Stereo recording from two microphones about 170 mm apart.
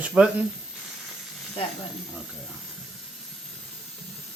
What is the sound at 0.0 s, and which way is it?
Speech, 5° right (ahead or behind).